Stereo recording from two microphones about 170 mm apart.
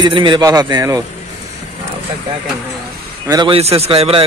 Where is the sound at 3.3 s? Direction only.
25° right (ahead or behind).